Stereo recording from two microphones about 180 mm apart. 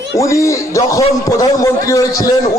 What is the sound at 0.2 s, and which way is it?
A man's voice, 15° left (ahead or behind).